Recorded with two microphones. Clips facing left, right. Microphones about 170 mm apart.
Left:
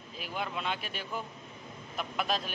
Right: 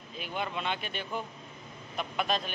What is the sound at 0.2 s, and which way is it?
Speech, centre (ahead or behind).